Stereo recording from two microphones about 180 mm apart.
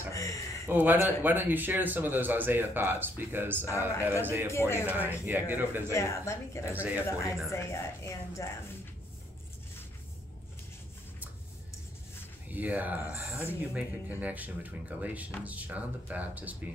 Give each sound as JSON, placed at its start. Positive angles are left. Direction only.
{"t": 0.1, "sound": "a sound", "side_deg": 15}
{"t": 0.7, "sound": "a man's voice", "side_deg": -10}
{"t": 4.5, "sound": "a woman's voice", "side_deg": 15}
{"t": 4.8, "sound": "a man's voice", "side_deg": -10}
{"t": 5.9, "sound": "a woman's voice", "side_deg": 15}
{"t": 6.7, "sound": "a man's voice", "side_deg": -10}
{"t": 7.5, "sound": "a woman's voice", "side_deg": 15}
{"t": 12.4, "sound": "a man's voice", "side_deg": -10}
{"t": 13.0, "sound": "a woman's voice", "side_deg": 15}
{"t": 13.6, "sound": "a man's voice", "side_deg": -10}